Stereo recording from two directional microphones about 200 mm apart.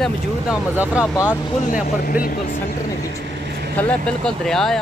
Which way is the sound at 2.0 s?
45° left (ahead or behind).